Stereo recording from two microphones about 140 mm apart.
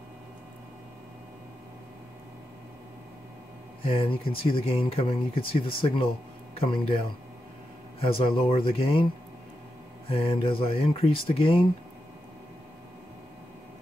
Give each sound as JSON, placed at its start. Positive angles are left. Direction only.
{"t": 3.8, "sound": "speech", "side_deg": 40}
{"t": 8.0, "sound": "speech", "side_deg": 40}
{"t": 10.0, "sound": "speech", "side_deg": 40}